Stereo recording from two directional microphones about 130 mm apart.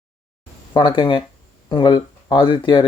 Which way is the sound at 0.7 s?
40° left (ahead or behind).